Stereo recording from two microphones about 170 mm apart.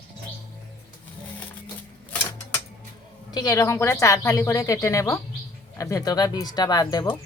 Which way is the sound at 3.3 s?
20° left (ahead or behind).